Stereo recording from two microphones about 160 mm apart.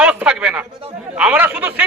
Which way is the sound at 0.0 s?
5° right (ahead or behind).